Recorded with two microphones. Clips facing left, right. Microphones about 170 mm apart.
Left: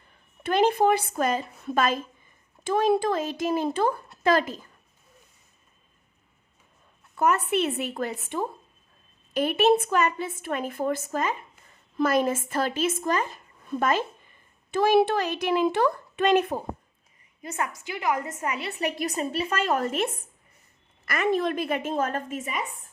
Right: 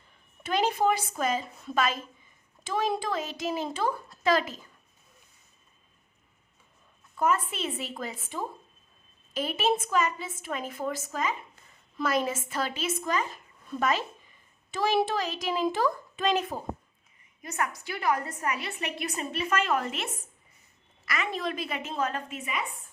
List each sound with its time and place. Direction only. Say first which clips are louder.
0.4 s speech: left 5 dB; 55° left (ahead or behind)
7.2 s a woman's voice: left 4 dB; 70° left (ahead or behind)
17.4 s a woman's voice: left 1 dB; 30° left (ahead or behind); by 22.6 s 45° left (ahead or behind)